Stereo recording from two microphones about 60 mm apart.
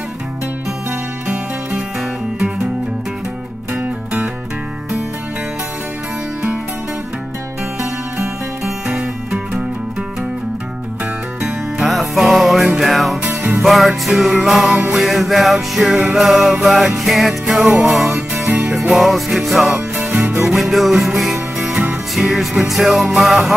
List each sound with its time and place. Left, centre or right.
2.3 s music: centre
8.6 s music: centre
11.8 s music: centre
20.2 s music: right
20.4 s music: centre